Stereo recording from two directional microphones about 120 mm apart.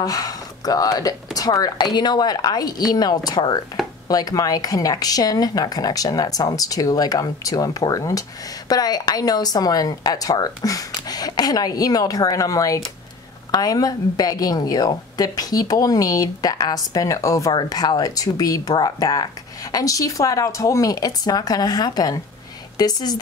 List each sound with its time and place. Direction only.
0.0 s speech: 30° left (ahead or behind)